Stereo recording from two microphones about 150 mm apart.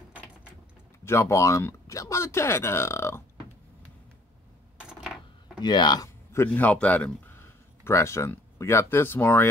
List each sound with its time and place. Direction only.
1.0 s speech: 15° left (ahead or behind)
4.8 s a sound: 5° right (ahead or behind)
5.6 s speech: 30° left (ahead or behind)
6.3 s a man's voice: 15° left (ahead or behind)